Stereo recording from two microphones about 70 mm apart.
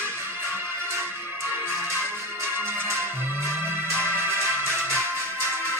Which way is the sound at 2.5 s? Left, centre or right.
Right.